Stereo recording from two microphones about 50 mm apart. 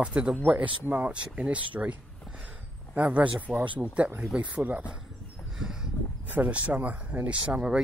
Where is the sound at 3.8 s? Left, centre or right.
Right.